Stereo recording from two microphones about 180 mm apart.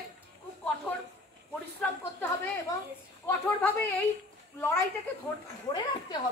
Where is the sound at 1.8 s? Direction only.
10° left (ahead or behind).